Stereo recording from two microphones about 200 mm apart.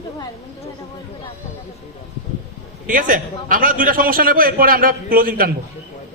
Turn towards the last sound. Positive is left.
turn(degrees=-45)  # may be behind; listen again after turning